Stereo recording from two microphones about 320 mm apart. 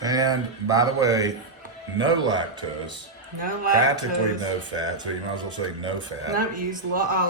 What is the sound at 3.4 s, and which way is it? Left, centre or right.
Speech, right.